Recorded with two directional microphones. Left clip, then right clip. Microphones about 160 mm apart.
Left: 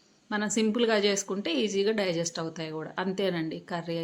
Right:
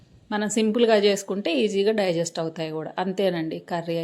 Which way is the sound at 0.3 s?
25° right (ahead or behind).